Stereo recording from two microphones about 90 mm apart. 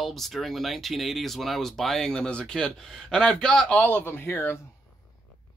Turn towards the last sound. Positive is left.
turn(degrees=30)  # may be behind; listen again after turning